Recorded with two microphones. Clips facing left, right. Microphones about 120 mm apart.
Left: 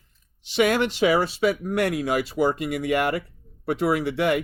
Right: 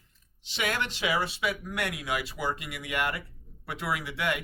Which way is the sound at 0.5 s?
40° left (ahead or behind).